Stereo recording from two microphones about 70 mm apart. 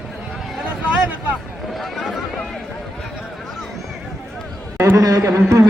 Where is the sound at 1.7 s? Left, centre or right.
Centre.